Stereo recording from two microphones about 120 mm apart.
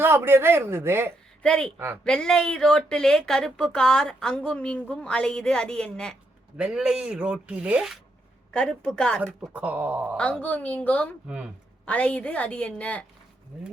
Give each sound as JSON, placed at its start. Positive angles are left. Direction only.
{"t": 0.0, "sound": "speech", "side_deg": -20}
{"t": 1.4, "sound": "speech", "side_deg": 5}
{"t": 6.6, "sound": "speech", "side_deg": -5}
{"t": 8.5, "sound": "speech", "side_deg": 5}
{"t": 9.5, "sound": "speech", "side_deg": -10}
{"t": 10.2, "sound": "speech", "side_deg": 10}
{"t": 11.3, "sound": "speech", "side_deg": -5}
{"t": 11.9, "sound": "speech", "side_deg": 10}